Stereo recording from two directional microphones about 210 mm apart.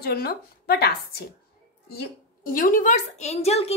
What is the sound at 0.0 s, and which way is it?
A woman's voice, 45° left (ahead or behind).